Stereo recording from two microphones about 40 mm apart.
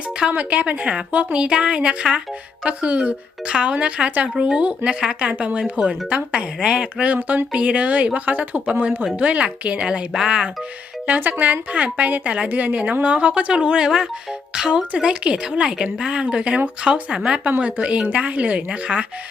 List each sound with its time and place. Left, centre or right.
0.3 s a woman's voice: right
1.4 s a woman's voice: right
6.6 s speech: centre
6.9 s a woman's voice: right
10.1 s speech: centre
11.2 s a woman's voice: right
17.6 s a woman's voice: right